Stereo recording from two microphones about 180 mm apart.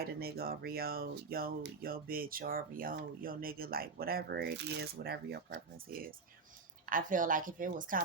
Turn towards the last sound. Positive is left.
turn(degrees=-50)  # may be behind; listen again after turning